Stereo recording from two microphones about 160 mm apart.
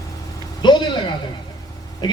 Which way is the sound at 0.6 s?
30° left (ahead or behind).